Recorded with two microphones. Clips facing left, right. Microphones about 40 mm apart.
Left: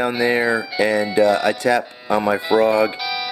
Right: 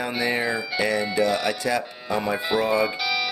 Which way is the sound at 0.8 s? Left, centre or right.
Left.